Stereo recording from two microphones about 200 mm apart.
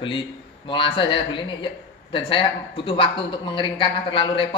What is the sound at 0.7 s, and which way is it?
Speech, 25° left (ahead or behind).